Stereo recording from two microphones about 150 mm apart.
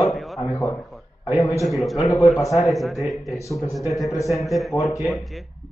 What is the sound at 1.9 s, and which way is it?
Speech, 20° left (ahead or behind).